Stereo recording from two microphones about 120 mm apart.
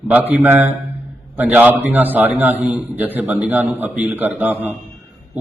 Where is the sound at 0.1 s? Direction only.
15° right (ahead or behind).